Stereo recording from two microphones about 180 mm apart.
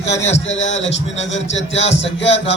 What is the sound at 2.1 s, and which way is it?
Music, 80° left.